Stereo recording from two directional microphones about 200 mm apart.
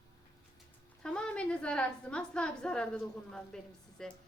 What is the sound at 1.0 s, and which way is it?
A woman's voice, 5° left (ahead or behind).